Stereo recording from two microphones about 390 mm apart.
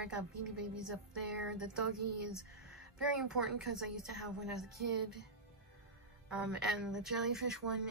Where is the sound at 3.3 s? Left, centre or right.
Right.